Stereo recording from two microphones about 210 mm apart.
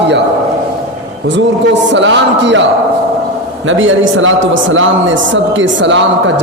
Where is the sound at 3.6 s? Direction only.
65° right (ahead or behind).